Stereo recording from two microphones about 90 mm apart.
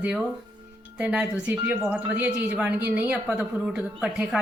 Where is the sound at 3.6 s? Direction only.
5° right (ahead or behind).